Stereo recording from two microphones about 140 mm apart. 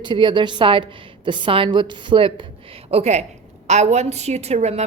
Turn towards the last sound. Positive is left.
turn(degrees=-50)  # may be behind; listen again after turning